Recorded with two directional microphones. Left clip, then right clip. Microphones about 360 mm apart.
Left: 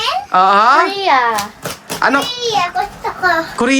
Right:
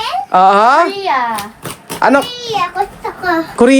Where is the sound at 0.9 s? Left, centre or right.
Left.